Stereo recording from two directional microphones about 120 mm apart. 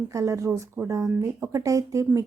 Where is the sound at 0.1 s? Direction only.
25° right (ahead or behind).